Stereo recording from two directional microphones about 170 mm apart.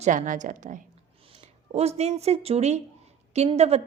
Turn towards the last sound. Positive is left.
turn(degrees=-40)  # may be behind; listen again after turning